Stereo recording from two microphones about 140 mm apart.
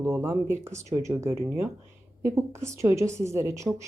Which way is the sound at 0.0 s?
20° right (ahead or behind).